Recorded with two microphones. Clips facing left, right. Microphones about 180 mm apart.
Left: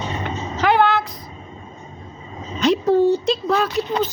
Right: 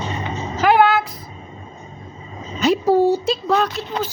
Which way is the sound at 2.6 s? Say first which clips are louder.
Even; 5° right (ahead or behind).